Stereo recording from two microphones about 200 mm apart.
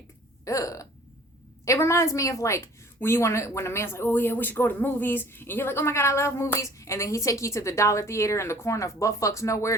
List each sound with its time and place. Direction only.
0.4 s hiccup: 15° left (ahead or behind)
1.6 s a woman's voice: 15° left (ahead or behind)